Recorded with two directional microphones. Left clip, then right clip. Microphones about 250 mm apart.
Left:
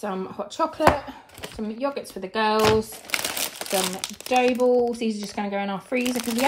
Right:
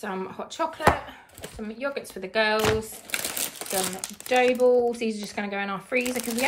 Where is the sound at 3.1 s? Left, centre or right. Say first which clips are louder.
Left 4 dB; left.